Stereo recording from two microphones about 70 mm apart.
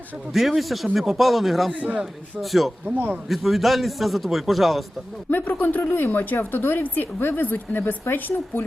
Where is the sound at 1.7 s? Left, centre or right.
Right.